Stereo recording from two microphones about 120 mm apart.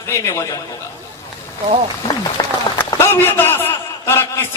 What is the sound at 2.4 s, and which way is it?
Applause, 35° left (ahead or behind).